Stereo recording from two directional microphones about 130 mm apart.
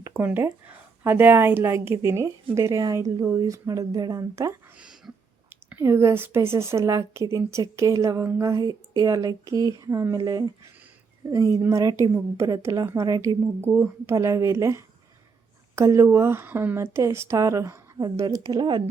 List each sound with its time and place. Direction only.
0.0 s speech: 15° right (ahead or behind)
4.8 s whispering: 5° right (ahead or behind)
5.6 s speech: 20° right (ahead or behind); by 18.8 s 35° right (ahead or behind)